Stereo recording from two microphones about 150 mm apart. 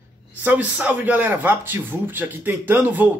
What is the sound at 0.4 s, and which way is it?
A man's voice, 10° right (ahead or behind).